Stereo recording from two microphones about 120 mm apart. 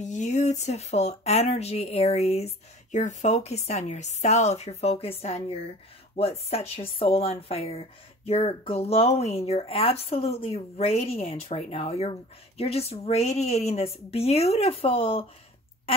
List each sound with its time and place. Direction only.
0.0 s speech: 80° left; by 15.2 s 50° left (ahead or behind)